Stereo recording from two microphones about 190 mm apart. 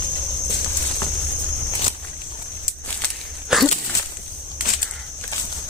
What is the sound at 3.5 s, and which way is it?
Dog, centre (ahead or behind).